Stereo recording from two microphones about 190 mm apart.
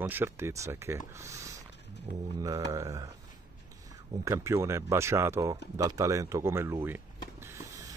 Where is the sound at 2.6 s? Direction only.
15° right (ahead or behind).